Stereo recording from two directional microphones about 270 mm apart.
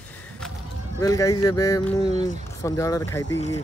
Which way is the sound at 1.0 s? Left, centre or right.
Centre.